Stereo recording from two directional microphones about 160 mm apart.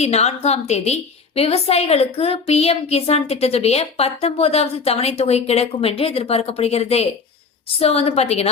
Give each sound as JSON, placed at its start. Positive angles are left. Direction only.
{"t": 0.0, "sound": "a woman's voice", "side_deg": 40}